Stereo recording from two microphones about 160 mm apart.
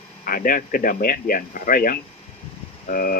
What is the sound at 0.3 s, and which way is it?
Speech, 60° left (ahead or behind).